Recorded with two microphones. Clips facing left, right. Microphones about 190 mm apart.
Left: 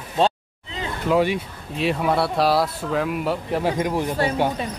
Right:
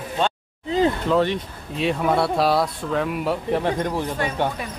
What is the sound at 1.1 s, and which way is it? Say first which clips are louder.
Speech: even; 10° left (ahead or behind).